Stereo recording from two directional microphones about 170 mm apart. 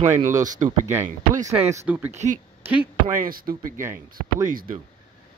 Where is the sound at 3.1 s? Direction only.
55° right (ahead or behind).